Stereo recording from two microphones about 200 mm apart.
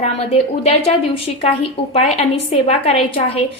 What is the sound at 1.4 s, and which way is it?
A woman's voice, 30° left (ahead or behind).